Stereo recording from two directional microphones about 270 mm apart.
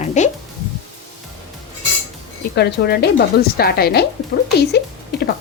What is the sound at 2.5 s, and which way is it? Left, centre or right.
Speech, left.